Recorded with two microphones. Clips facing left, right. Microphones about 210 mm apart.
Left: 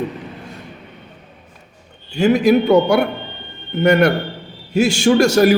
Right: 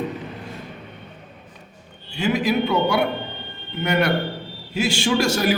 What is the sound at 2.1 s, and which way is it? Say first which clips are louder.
Speech: left 8 dB; 45° left (ahead or behind).